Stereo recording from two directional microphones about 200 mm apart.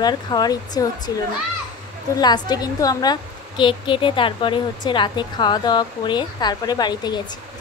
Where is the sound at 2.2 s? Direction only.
20° left (ahead or behind).